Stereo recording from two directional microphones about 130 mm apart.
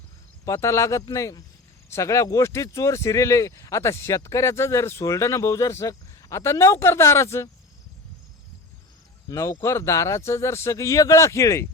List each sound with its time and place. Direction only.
0.4 s speech: 25° left (ahead or behind)
9.3 s speech: 25° left (ahead or behind)